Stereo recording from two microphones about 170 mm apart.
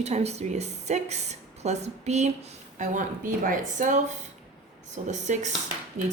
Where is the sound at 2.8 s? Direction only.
50° right (ahead or behind).